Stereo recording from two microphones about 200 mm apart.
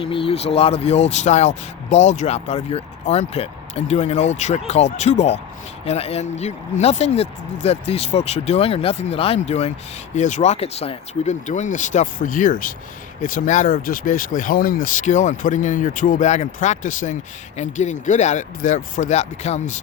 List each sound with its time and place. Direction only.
0.0 s speech: 25° left (ahead or behind)